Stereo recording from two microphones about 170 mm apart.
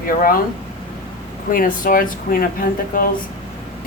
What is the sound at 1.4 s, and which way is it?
Speech, 55° left (ahead or behind).